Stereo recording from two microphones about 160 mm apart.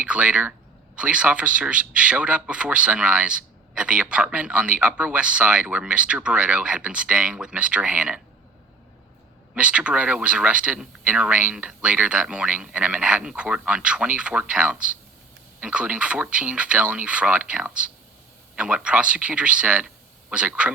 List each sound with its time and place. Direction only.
0.0 s speech: 10° right (ahead or behind)
9.6 s speech: 5° right (ahead or behind)